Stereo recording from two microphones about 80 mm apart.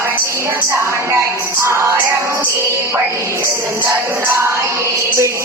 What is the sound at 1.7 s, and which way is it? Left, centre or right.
Music, right.